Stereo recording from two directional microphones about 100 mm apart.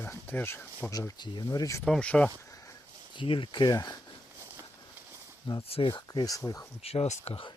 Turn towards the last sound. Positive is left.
turn(degrees=80)